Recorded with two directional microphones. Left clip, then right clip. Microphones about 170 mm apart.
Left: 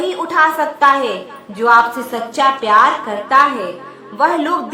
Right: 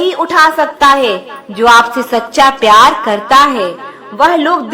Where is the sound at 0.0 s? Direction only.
30° right (ahead or behind).